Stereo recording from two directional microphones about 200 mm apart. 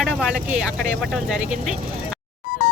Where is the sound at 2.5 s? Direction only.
50° left (ahead or behind).